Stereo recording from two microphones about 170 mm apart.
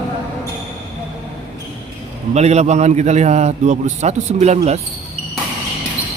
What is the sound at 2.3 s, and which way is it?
A man's voice, 40° right (ahead or behind).